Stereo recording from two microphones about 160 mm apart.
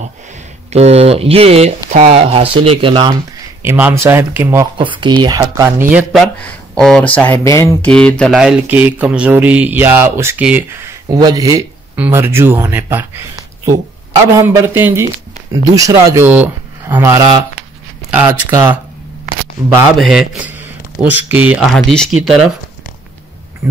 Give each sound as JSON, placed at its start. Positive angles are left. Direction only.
{"t": 0.7, "sound": "speech", "side_deg": -40}
{"t": 2.1, "sound": "speech", "side_deg": -35}
{"t": 3.6, "sound": "speech", "side_deg": -15}
{"t": 4.7, "sound": "speech", "side_deg": -30}
{"t": 5.9, "sound": "speech", "side_deg": -5}
{"t": 6.4, "sound": "speech", "side_deg": 5}
{"t": 7.4, "sound": "mantra", "side_deg": 20}
{"t": 7.8, "sound": "speech", "side_deg": 10}
{"t": 8.4, "sound": "speech", "side_deg": -5}
{"t": 11.9, "sound": "speech", "side_deg": -15}
{"t": 20.0, "sound": "speech", "side_deg": 0}